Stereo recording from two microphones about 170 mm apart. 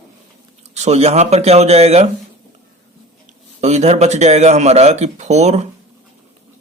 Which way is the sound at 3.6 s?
40° right (ahead or behind).